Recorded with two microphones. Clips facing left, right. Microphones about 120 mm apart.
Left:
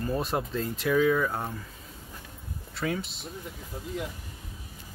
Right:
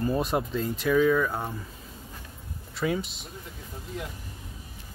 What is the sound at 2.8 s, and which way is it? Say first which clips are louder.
Speech: right 3 dB; 5° right (ahead or behind).